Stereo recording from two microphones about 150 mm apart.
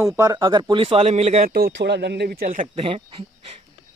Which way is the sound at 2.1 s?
90° right.